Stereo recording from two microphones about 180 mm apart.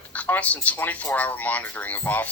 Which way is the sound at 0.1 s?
10° left (ahead or behind).